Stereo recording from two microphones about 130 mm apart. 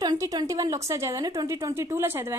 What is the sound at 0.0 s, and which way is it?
A woman's voice, 30° right (ahead or behind).